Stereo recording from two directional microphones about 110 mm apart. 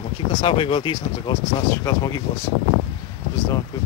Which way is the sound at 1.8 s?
35° left (ahead or behind).